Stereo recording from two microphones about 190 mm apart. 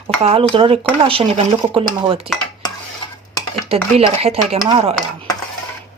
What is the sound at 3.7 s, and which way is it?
Speech, 30° right (ahead or behind).